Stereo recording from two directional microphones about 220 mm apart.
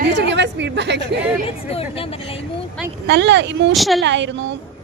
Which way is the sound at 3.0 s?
50° right (ahead or behind).